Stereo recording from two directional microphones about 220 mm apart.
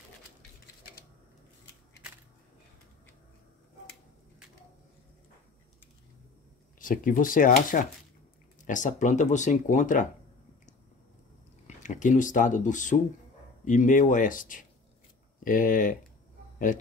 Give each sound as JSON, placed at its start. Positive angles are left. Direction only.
{"t": 6.8, "sound": "speech", "side_deg": 40}
{"t": 11.6, "sound": "speech", "side_deg": 35}